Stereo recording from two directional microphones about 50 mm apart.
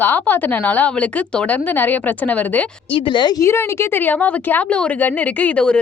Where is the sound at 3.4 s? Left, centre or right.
Left.